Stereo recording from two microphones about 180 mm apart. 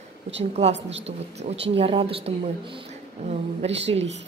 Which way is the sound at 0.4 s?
35° right (ahead or behind).